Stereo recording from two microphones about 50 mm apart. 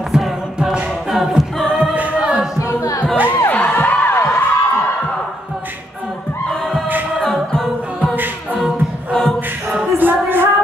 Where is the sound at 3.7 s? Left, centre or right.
Left.